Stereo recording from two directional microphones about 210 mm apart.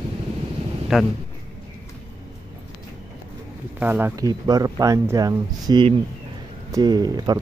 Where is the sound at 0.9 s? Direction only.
Centre (ahead or behind).